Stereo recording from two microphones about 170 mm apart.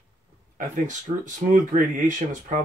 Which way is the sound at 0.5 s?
50° right (ahead or behind).